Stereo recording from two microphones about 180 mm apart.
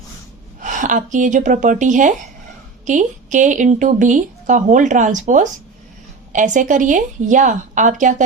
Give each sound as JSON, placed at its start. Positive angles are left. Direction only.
{"t": 0.6, "sound": "speech", "side_deg": -45}